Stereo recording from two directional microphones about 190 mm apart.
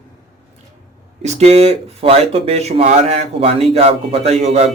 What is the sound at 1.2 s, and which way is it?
Speech, 35° right (ahead or behind).